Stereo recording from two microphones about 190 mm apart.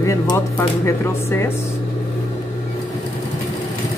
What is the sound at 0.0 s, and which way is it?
Speech, 15° left (ahead or behind).